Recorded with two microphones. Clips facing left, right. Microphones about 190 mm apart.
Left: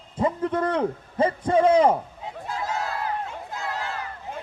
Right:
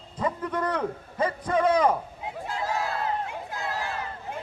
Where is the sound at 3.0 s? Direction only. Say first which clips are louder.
Even; 20° right (ahead or behind).